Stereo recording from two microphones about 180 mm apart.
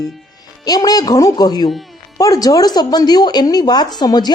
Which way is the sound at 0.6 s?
20° left (ahead or behind).